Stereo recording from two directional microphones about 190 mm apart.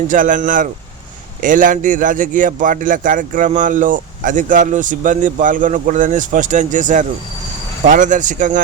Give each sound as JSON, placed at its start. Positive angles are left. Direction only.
{"t": 0.1, "sound": "a man's voice", "side_deg": -45}